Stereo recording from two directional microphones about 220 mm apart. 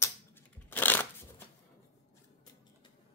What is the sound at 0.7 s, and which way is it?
Shuffling cards, 10° left (ahead or behind).